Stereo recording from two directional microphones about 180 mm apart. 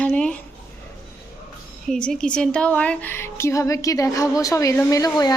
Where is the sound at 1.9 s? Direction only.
5° left (ahead or behind); by 5.3 s 20° left (ahead or behind).